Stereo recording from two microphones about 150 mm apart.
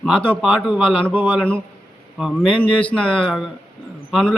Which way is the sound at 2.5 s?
10° left (ahead or behind).